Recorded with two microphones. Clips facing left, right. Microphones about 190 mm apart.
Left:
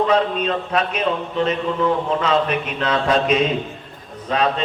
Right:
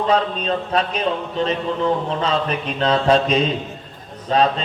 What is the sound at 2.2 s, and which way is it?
A man's voice, 30° right (ahead or behind).